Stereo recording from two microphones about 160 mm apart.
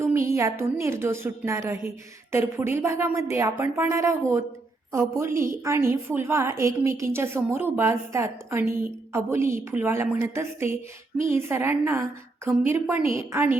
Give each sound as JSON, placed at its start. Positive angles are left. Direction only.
{"t": 0.0, "sound": "a woman's voice", "side_deg": -15}